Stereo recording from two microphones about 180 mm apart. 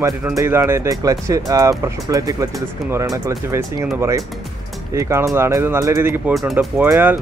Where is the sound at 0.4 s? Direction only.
15° right (ahead or behind).